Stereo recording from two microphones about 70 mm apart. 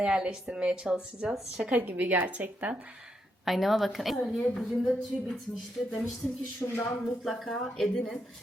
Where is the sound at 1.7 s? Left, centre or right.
Right.